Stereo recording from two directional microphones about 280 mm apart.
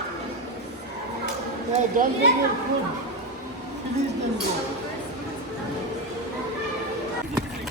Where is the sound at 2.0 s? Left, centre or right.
Right.